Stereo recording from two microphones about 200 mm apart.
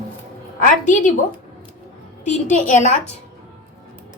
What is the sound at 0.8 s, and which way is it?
Speech, 40° left (ahead or behind).